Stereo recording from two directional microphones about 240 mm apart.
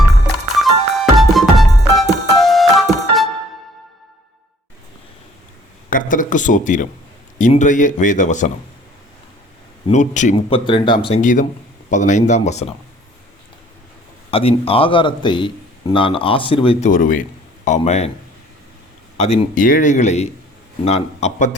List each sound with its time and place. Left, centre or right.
0.5 s music: centre
5.9 s speech: left
9.8 s a man's voice: left
14.3 s a man's voice: left
16.9 s a man's voice: left
19.1 s a man's voice: left